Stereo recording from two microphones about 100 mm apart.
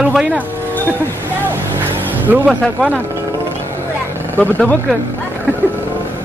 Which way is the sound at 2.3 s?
20° right (ahead or behind).